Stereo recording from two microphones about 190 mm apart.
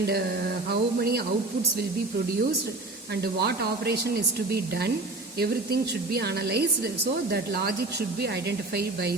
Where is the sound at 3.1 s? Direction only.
60° right (ahead or behind).